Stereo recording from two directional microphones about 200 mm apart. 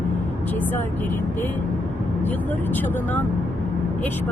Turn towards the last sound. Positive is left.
turn(degrees=10)  # may be behind; listen again after turning